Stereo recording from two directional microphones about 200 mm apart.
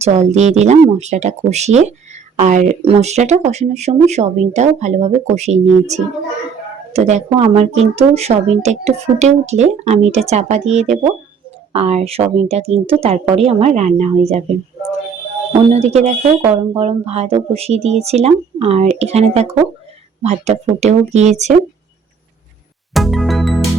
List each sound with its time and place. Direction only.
0.0 s speech: 35° right (ahead or behind)
6.9 s speech: 35° right (ahead or behind)
15.7 s speech: 30° right (ahead or behind)
23.0 s music: centre (ahead or behind)